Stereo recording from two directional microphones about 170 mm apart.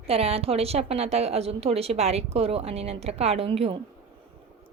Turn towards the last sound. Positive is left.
turn(degrees=-35)  # may be behind; listen again after turning